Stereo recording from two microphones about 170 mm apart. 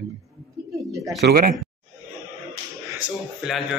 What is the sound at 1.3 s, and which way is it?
Speech, 60° right (ahead or behind).